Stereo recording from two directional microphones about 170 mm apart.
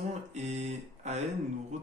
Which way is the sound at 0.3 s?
40° right (ahead or behind).